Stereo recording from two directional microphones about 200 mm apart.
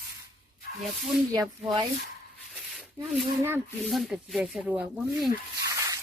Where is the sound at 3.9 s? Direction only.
5° right (ahead or behind).